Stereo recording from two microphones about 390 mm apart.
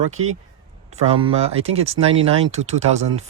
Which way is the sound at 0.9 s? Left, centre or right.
Centre.